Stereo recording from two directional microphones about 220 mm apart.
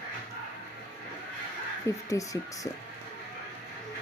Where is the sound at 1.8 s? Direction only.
15° left (ahead or behind).